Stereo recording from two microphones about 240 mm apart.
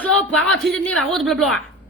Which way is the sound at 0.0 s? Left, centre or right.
Centre.